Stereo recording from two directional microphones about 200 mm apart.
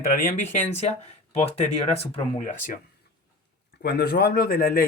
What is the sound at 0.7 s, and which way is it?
Speech, 35° left (ahead or behind).